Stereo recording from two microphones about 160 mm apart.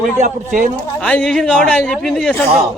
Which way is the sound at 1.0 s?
5° left (ahead or behind).